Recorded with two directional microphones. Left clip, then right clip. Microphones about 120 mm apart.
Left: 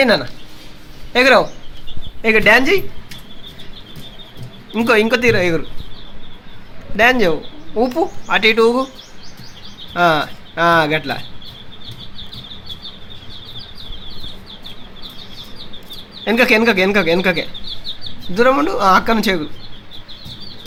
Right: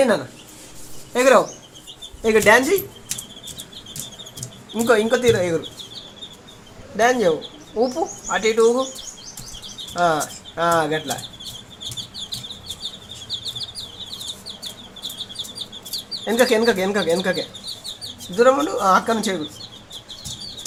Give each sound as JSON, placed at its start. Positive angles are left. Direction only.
{"t": 0.0, "sound": "speech", "side_deg": 20}
{"t": 4.7, "sound": "speech", "side_deg": 15}
{"t": 6.9, "sound": "speech", "side_deg": 15}
{"t": 9.9, "sound": "speech", "side_deg": 20}
{"t": 16.2, "sound": "speech", "side_deg": 20}
{"t": 18.3, "sound": "speech", "side_deg": 25}